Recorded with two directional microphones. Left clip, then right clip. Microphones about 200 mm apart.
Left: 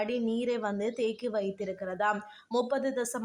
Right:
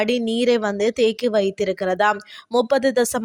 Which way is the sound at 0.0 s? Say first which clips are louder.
Right 11 dB; 45° right (ahead or behind).